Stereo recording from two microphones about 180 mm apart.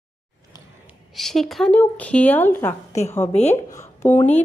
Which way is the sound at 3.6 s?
15° left (ahead or behind).